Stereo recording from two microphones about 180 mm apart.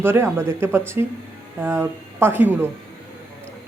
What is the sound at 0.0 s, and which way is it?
Speech, 15° right (ahead or behind).